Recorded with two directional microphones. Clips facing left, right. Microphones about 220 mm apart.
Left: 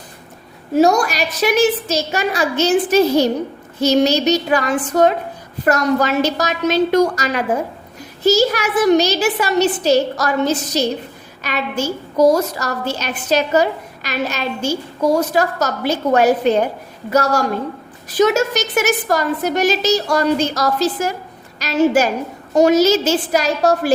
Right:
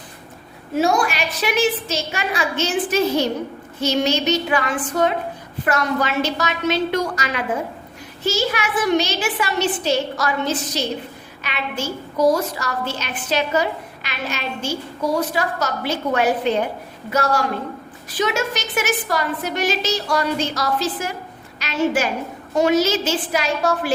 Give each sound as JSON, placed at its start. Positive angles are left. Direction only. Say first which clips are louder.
{"t": 0.7, "sound": "a woman's voice", "louder": "left 5 dB", "side_deg": 40}